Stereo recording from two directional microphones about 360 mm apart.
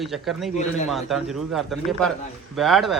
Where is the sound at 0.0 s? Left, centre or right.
Centre.